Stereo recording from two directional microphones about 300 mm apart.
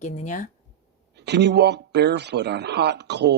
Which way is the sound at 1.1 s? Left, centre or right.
Right.